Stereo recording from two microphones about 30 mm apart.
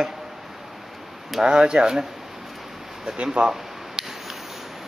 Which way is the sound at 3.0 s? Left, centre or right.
Right.